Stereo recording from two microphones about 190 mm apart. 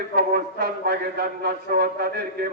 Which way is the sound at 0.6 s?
55° right (ahead or behind).